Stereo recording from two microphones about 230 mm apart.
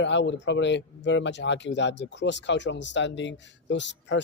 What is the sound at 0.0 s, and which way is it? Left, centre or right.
Speech, left.